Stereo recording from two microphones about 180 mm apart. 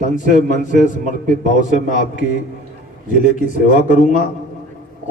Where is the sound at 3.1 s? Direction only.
45° left (ahead or behind).